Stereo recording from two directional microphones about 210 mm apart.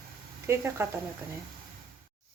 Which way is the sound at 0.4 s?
10° right (ahead or behind).